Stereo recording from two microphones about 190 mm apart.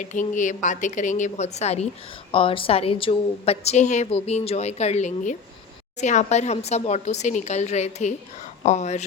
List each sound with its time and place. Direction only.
0.0 s a woman's voice: 40° left (ahead or behind)